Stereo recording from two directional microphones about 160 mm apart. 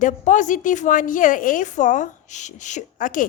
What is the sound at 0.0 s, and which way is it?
A woman's voice, 50° left (ahead or behind).